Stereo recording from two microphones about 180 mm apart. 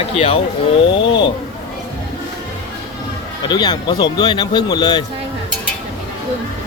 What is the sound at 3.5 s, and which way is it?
A man's voice, 25° left (ahead or behind).